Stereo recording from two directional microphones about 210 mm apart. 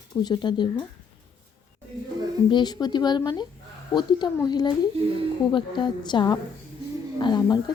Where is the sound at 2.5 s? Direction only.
20° left (ahead or behind).